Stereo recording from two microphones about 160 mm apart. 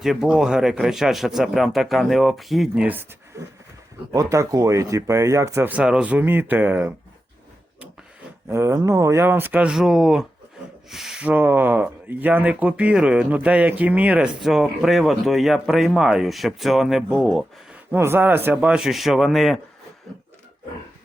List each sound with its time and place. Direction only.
0.0 s speech: 5° right (ahead or behind)
8.4 s speech: 20° right (ahead or behind); by 17.7 s centre (ahead or behind)
17.9 s speech: 15° right (ahead or behind)